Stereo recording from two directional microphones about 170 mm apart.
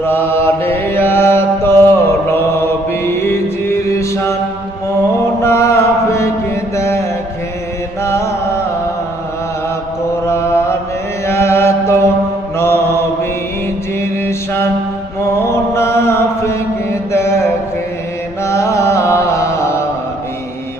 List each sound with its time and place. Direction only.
0.0 s mantra: 15° left (ahead or behind)
5.4 s chant: 15° left (ahead or behind)
6.7 s mantra: 15° left (ahead or behind)
8.0 s chant: 15° left (ahead or behind)
10.2 s mantra: 15° left (ahead or behind)
11.3 s chant: 15° left (ahead or behind)
12.5 s mantra: 15° left (ahead or behind)
14.0 s mantra: 15° left (ahead or behind)
15.4 s chant: 15° left (ahead or behind)
18.4 s music: 15° left (ahead or behind)